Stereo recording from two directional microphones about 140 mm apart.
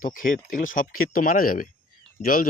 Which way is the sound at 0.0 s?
75° left (ahead or behind).